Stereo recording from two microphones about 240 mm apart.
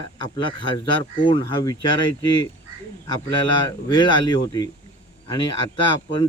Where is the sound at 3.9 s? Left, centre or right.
Centre.